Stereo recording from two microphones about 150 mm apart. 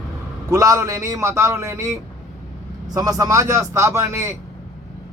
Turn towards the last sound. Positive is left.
turn(degrees=-20)  # may be behind; listen again after turning